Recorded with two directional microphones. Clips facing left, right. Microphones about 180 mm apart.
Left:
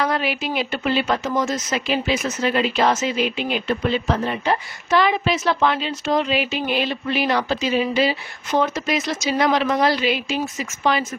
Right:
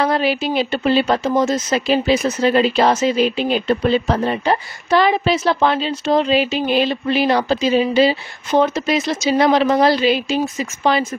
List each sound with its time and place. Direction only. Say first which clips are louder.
0.0 s speech: right 5 dB; 30° right (ahead or behind)